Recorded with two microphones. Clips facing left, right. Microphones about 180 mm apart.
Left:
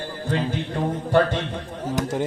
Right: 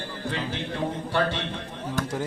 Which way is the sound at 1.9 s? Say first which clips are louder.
Left 5 dB; 20° left (ahead or behind).